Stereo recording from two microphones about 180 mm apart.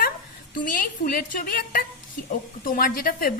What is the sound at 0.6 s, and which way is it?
A woman's voice, 50° left (ahead or behind).